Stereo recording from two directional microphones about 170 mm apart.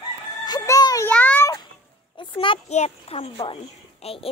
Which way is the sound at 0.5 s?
20° left (ahead or behind).